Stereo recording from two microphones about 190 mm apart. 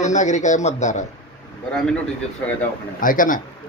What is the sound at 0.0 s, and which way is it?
Speech, 40° left (ahead or behind).